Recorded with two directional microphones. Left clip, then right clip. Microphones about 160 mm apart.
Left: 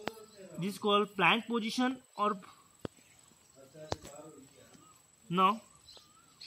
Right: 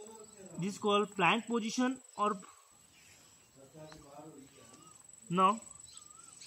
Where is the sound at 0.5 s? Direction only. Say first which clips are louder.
Left 2 dB; 15° left (ahead or behind).